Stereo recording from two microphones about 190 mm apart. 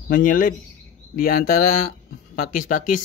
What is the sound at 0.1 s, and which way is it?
Speech, 45° left (ahead or behind).